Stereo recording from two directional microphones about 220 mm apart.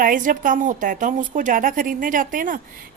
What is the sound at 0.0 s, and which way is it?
A woman's voice, 40° right (ahead or behind).